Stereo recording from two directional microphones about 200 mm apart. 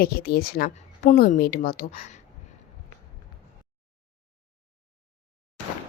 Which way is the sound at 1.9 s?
35° left (ahead or behind).